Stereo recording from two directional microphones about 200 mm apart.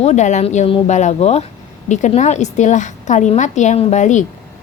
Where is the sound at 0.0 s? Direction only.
35° left (ahead or behind).